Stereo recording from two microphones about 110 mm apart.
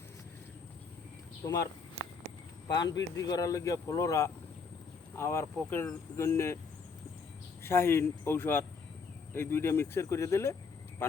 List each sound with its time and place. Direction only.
2.6 s speech: 35° left (ahead or behind)
7.6 s speech: 20° left (ahead or behind)